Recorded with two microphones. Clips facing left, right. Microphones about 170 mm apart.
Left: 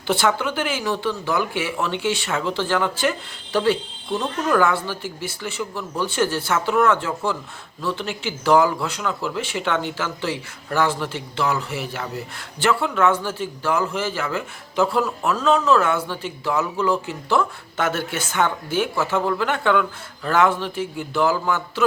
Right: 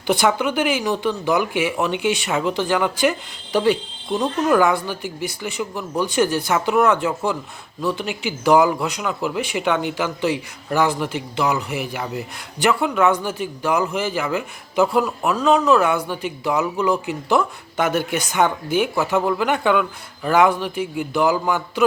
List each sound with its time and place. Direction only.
0.1 s speech: 15° right (ahead or behind)